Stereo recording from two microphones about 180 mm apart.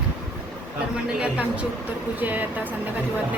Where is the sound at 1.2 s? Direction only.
5° right (ahead or behind).